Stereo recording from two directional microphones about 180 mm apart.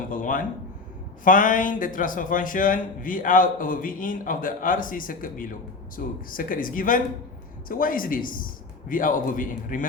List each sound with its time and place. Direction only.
0.1 s a man's voice: 50° left (ahead or behind)